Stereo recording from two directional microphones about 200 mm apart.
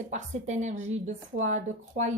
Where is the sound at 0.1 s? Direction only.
35° right (ahead or behind).